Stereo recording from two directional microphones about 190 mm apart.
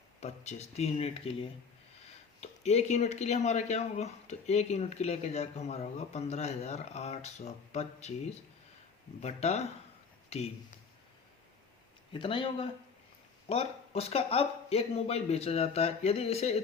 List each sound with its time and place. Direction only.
0.2 s speech: 35° left (ahead or behind)
9.2 s speech: 35° left (ahead or behind)
12.1 s speech: 25° left (ahead or behind)